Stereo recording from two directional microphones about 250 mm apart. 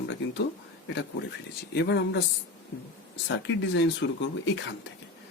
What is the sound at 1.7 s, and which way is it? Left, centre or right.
Speech, left.